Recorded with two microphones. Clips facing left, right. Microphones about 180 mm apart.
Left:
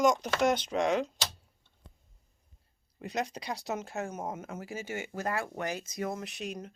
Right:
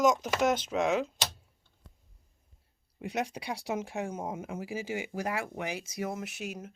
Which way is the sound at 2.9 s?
10° right (ahead or behind).